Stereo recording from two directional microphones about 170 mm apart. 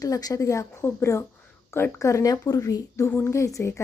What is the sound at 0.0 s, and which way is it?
A woman's voice, 20° left (ahead or behind).